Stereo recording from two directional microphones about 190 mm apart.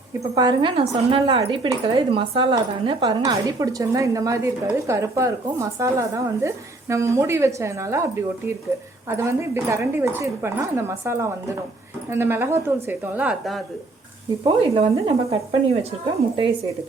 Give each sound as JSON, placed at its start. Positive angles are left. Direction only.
{"t": 0.3, "sound": "speech", "side_deg": -25}
{"t": 14.4, "sound": "speech", "side_deg": -30}